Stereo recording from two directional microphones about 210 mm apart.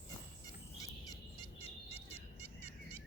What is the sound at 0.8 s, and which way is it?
Fowl, 15° left (ahead or behind).